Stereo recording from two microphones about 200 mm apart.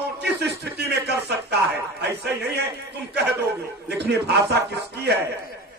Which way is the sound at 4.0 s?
55° right (ahead or behind).